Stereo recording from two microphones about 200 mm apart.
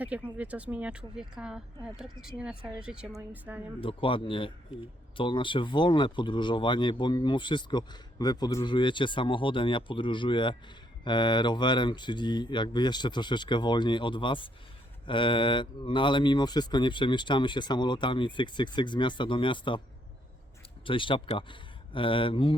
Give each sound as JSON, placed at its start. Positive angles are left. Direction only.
{"t": 0.0, "sound": "speech", "side_deg": -5}
{"t": 3.8, "sound": "speech", "side_deg": 25}
{"t": 20.8, "sound": "speech", "side_deg": 25}